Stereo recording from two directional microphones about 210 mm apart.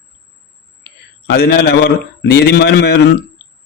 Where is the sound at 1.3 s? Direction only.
50° left (ahead or behind).